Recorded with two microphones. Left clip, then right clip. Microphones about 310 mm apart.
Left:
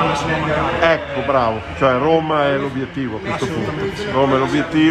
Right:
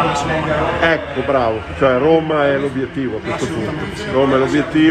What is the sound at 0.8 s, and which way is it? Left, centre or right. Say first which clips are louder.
A man's voice: even; left.